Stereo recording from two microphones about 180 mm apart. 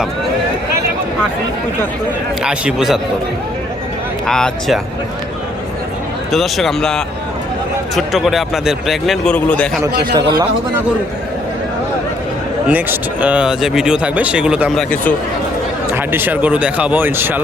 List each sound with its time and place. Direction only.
2.4 s speech: 5° right (ahead or behind)
4.3 s speech: 5° left (ahead or behind)
6.3 s speech: centre (ahead or behind)
10.0 s a man's voice: 25° right (ahead or behind)
12.6 s speech: 10° right (ahead or behind)
16.0 s speech: 10° right (ahead or behind)